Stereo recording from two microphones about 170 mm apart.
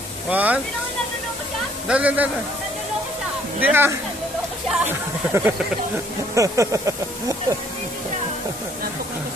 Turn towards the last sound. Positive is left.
turn(degrees=-20)  # may be behind; listen again after turning